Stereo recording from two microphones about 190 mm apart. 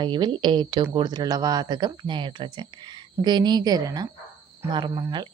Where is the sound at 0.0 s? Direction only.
25° right (ahead or behind).